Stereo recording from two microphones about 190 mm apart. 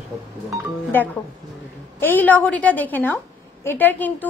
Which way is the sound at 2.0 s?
10° left (ahead or behind).